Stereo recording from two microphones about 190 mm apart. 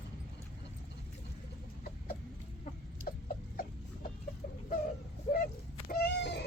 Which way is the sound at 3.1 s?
45° left (ahead or behind).